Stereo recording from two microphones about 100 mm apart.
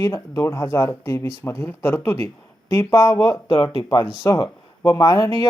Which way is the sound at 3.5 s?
40° left (ahead or behind).